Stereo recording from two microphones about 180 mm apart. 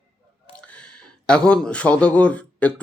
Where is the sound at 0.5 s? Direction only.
5° left (ahead or behind).